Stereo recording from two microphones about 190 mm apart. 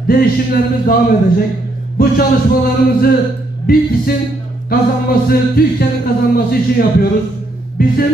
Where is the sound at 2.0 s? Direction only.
50° left (ahead or behind).